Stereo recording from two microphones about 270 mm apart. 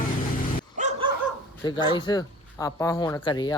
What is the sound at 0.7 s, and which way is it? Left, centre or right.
Dog, right.